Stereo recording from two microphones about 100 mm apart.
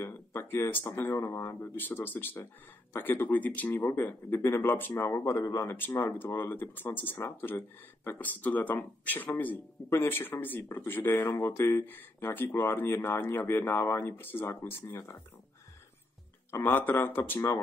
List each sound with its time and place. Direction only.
0.0 s speech: 25° left (ahead or behind)
16.6 s speech: 20° left (ahead or behind)